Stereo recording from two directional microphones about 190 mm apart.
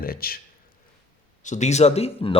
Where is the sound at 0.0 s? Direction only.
50° left (ahead or behind).